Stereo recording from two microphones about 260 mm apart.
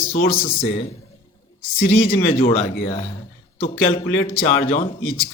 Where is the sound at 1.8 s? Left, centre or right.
Left.